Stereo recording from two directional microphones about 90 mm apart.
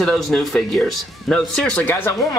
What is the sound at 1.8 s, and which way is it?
Speech, 25° left (ahead or behind).